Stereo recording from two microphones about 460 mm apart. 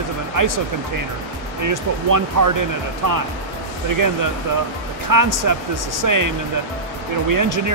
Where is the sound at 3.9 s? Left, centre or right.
Right.